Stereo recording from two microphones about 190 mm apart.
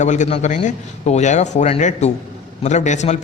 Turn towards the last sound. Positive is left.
turn(degrees=40)  # may be behind; listen again after turning